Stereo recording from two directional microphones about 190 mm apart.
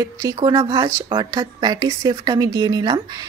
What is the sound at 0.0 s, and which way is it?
Speech, 20° right (ahead or behind).